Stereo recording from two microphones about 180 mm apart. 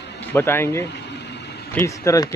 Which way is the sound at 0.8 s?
70° left (ahead or behind).